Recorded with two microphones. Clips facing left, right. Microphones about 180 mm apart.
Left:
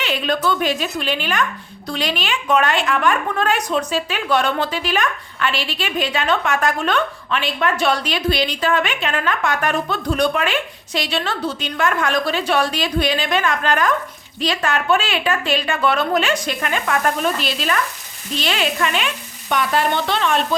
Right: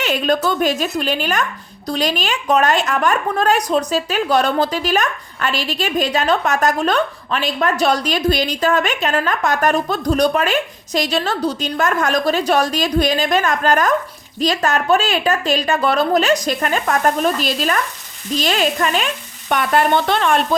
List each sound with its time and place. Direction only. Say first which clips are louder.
0.0 s frying: right 3 dB; 45° right (ahead or behind)
1.9 s a woman's voice: right 3 dB; 40° right (ahead or behind)
18.3 s frying: right 3 dB; 40° right (ahead or behind)